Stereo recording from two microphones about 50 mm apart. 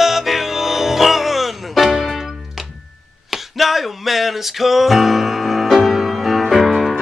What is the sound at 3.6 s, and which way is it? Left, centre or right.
Music, centre.